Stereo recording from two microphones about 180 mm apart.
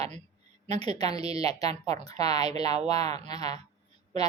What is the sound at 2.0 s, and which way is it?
Speech, 20° left (ahead or behind).